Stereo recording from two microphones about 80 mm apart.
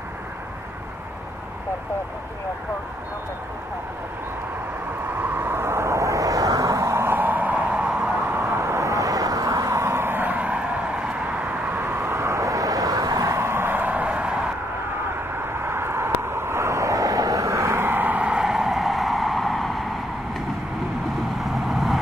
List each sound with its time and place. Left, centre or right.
5.2 s vehicle: right
7.2 s a sound: right
8.3 s vehicle: right; by 14.4 s centre
15.3 s vehicle: right; by 19.9 s centre
21.4 s vehicle: centre